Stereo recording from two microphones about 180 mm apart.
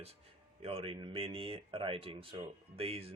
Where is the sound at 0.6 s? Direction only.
30° right (ahead or behind).